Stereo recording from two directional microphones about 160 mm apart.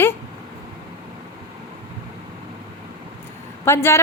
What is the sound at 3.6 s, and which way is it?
Speech, 15° left (ahead or behind).